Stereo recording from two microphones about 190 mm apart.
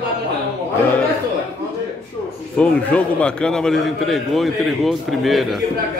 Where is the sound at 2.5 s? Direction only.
5° left (ahead or behind).